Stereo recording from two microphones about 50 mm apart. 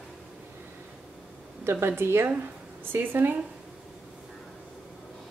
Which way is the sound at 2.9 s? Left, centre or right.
Right.